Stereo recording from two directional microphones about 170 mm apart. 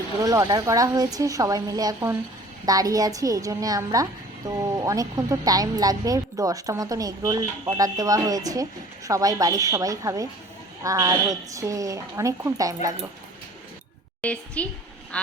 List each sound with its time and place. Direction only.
0.2 s a woman's voice: 20° right (ahead or behind)
14.2 s a woman's voice: 10° left (ahead or behind)